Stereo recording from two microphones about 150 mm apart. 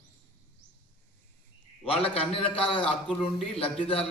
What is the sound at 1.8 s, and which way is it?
A man's voice, 40° left (ahead or behind).